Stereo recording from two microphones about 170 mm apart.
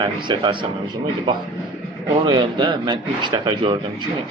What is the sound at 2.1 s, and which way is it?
A man's voice, 30° right (ahead or behind).